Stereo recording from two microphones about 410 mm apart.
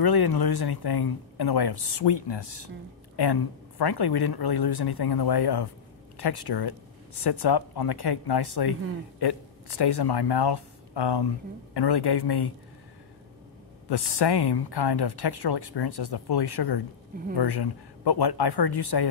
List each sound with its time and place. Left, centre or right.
0.0 s speech: left
3.2 s speech: left
13.8 s speech: left